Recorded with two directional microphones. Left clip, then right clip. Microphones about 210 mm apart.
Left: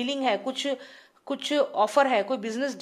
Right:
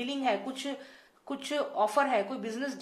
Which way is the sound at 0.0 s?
45° left (ahead or behind).